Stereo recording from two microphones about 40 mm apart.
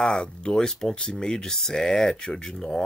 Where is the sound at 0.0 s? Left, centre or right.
Left.